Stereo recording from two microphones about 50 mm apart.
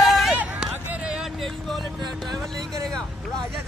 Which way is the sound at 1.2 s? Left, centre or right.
Centre.